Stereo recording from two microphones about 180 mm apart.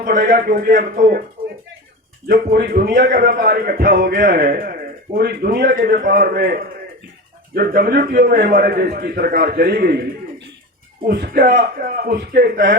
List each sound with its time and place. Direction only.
0.0 s a man's voice: 50° right (ahead or behind)
2.2 s a man's voice: 55° right (ahead or behind)
11.0 s a man's voice: 50° right (ahead or behind)